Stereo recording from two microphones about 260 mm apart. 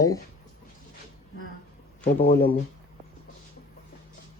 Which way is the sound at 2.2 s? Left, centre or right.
Left.